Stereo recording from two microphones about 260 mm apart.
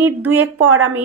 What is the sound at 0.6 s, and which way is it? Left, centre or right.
Speech, right.